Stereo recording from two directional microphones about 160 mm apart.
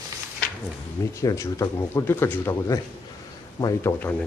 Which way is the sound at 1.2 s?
20° left (ahead or behind).